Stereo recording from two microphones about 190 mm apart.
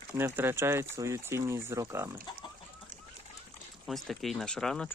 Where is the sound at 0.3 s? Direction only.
10° right (ahead or behind).